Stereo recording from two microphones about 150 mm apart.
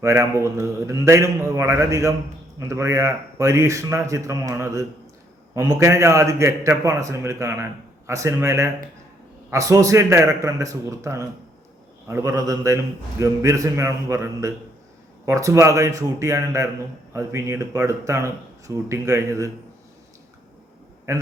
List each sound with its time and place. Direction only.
0.0 s a man's voice: 20° right (ahead or behind)
21.1 s a man's voice: 20° right (ahead or behind)